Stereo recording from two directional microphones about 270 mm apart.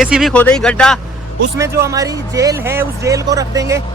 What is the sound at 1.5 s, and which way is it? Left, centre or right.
Speech, centre.